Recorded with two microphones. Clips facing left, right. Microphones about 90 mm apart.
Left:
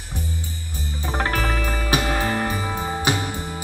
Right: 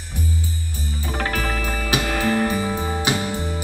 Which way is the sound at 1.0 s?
30° left (ahead or behind).